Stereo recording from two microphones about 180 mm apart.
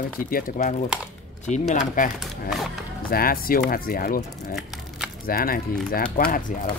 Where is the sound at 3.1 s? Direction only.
55° left (ahead or behind).